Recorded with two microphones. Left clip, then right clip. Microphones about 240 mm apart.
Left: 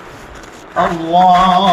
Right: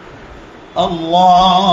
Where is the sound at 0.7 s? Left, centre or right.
Right.